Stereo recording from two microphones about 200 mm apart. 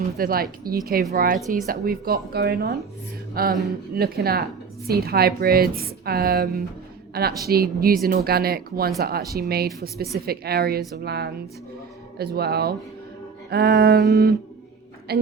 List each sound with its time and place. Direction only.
0.2 s a woman's voice: 50° right (ahead or behind)